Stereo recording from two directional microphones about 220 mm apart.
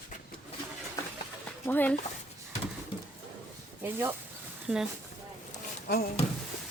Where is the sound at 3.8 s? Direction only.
10° right (ahead or behind).